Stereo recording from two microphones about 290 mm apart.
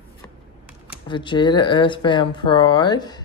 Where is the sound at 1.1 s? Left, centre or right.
Centre.